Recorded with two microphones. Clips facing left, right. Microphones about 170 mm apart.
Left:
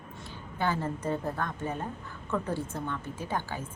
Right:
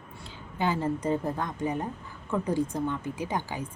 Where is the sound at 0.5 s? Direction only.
15° right (ahead or behind).